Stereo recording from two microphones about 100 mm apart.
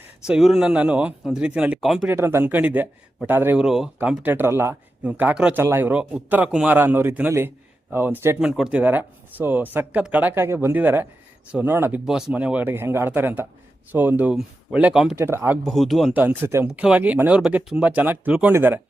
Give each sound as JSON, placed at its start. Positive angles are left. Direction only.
{"t": 0.3, "sound": "a man's voice", "side_deg": -5}
{"t": 1.8, "sound": "speech", "side_deg": 0}
{"t": 2.0, "sound": "speech", "side_deg": -25}
{"t": 3.6, "sound": "speech", "side_deg": -5}
{"t": 4.2, "sound": "a man's voice", "side_deg": -20}
{"t": 8.4, "sound": "a man's voice", "side_deg": -5}
{"t": 8.8, "sound": "speech", "side_deg": -20}
{"t": 12.0, "sound": "a man's voice", "side_deg": -5}
{"t": 15.1, "sound": "speech", "side_deg": -25}
{"t": 15.6, "sound": "speech", "side_deg": 5}
{"t": 16.1, "sound": "speech", "side_deg": -20}
{"t": 16.6, "sound": "a man's voice", "side_deg": -10}